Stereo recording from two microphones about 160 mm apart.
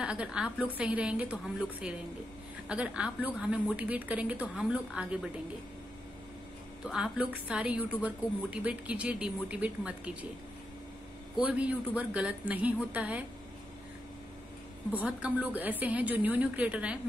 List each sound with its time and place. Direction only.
0.0 s a woman's voice: 5° right (ahead or behind)
6.8 s a woman's voice: 5° right (ahead or behind)
11.3 s a woman's voice: 10° right (ahead or behind)
14.9 s a woman's voice: 10° right (ahead or behind)